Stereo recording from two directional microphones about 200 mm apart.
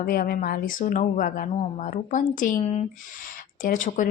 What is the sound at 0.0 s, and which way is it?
Speech, 45° left (ahead or behind).